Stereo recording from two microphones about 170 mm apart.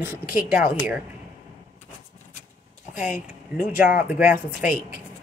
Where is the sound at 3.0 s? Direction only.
50° left (ahead or behind).